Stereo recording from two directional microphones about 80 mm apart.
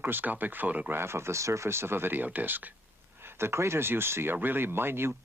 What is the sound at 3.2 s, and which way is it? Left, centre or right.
Speech, right.